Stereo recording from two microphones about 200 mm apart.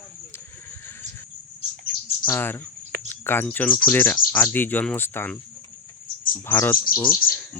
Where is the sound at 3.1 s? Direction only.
10° left (ahead or behind).